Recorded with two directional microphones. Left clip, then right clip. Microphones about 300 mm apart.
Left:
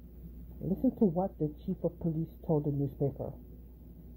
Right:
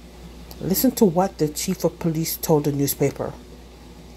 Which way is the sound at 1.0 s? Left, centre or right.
Right.